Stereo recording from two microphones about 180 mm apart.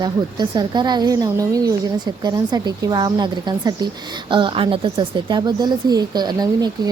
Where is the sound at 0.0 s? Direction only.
25° right (ahead or behind).